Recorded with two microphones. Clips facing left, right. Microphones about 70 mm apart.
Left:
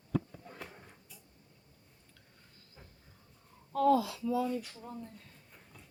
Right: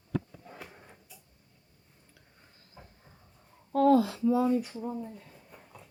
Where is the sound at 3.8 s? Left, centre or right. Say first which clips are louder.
Right 5 dB; right.